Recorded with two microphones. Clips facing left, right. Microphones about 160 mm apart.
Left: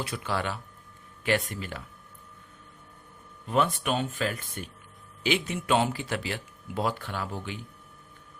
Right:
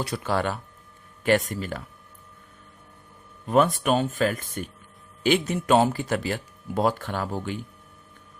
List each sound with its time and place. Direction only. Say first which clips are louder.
0.0 s speech: right 5 dB; 40° right (ahead or behind)
3.4 s speech: right 6 dB; 45° right (ahead or behind)